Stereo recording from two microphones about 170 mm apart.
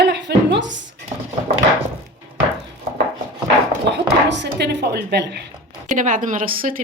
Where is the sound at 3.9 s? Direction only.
90° right.